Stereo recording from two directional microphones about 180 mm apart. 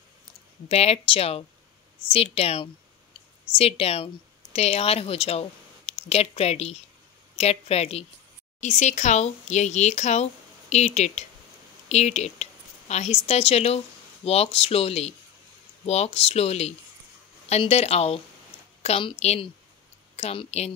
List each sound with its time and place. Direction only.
0.7 s a woman's voice: 35° left (ahead or behind)